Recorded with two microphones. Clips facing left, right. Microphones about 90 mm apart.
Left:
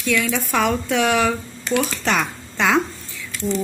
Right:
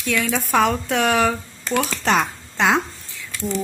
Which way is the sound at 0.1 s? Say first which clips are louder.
Right 1 dB; 40° right (ahead or behind).